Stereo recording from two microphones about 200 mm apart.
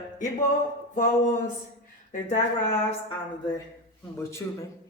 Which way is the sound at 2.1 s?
40° left (ahead or behind).